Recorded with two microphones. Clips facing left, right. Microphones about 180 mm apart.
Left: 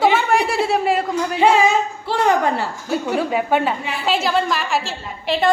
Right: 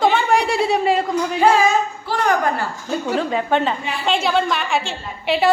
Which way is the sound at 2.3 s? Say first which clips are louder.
Left 1 dB; 25° left (ahead or behind).